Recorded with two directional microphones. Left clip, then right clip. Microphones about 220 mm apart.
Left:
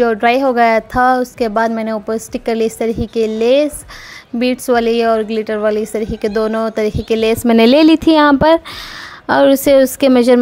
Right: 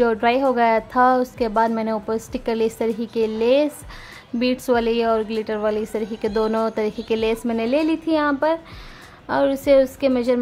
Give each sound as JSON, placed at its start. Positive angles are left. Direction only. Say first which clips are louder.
{"t": 0.0, "sound": "a woman's voice", "louder": "left 6 dB", "side_deg": 10}
{"t": 7.4, "sound": "a woman's voice", "louder": "left 12 dB", "side_deg": 40}